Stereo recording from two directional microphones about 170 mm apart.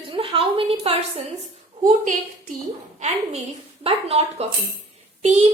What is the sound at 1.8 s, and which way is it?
Speech, 50° right (ahead or behind).